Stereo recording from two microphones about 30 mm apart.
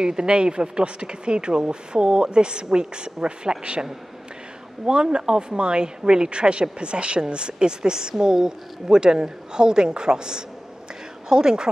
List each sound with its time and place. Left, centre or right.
0.0 s speech: right
4.8 s speech: right